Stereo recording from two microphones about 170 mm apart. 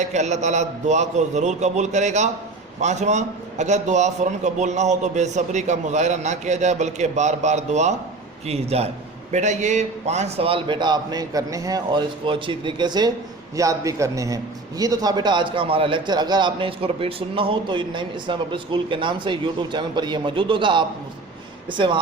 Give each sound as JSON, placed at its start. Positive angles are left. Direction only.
{"t": 0.0, "sound": "a man's voice", "side_deg": -45}